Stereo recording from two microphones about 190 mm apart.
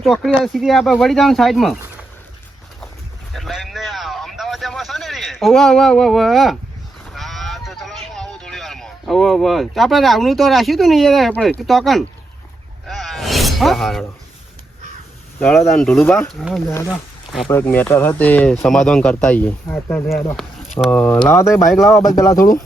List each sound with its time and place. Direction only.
0.0 s speech: centre (ahead or behind)
3.3 s vehicle: centre (ahead or behind)
7.0 s a sound: centre (ahead or behind)
15.4 s speech: 5° left (ahead or behind)
16.7 s speech: 15° left (ahead or behind); by 21.9 s centre (ahead or behind)
22.1 s speech: 15° left (ahead or behind)